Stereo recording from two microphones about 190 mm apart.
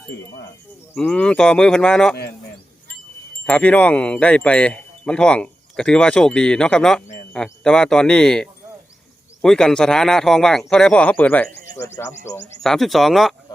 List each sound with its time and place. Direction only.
0.9 s speech: 5° left (ahead or behind)
3.4 s speech: 5° left (ahead or behind)
12.6 s speech: centre (ahead or behind)